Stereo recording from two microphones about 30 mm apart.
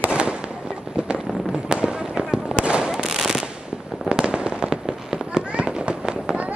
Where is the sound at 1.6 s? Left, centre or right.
Right.